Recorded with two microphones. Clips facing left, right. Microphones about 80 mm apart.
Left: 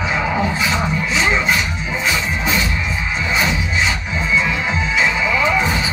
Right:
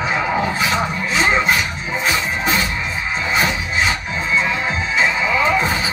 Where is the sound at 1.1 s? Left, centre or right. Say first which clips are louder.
Right 2 dB; right.